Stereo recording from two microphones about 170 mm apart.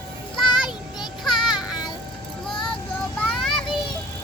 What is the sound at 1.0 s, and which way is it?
Children playing, centre (ahead or behind).